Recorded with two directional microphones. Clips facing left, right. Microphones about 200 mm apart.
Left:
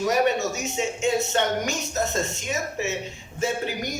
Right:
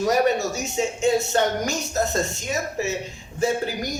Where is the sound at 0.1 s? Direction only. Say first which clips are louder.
Right 2 dB; 35° right (ahead or behind).